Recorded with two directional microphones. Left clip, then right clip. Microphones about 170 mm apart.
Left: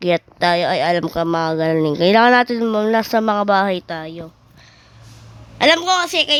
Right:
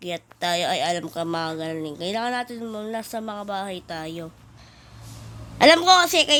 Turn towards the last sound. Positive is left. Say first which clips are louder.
# even
turn(degrees=0)  # may be behind; listen again after turning